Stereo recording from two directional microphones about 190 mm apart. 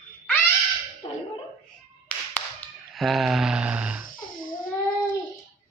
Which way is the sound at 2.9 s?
Centre (ahead or behind).